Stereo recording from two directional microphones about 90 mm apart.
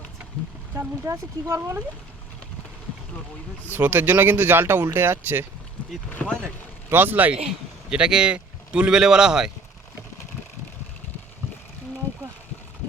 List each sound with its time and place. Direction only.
0.8 s speech: 30° right (ahead or behind)
3.7 s speech: 20° right (ahead or behind)
6.1 s speech: 15° left (ahead or behind)
6.9 s speech: 20° right (ahead or behind)
7.9 s speech: 10° right (ahead or behind)